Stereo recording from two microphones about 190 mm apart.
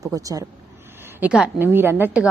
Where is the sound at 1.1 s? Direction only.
5° right (ahead or behind).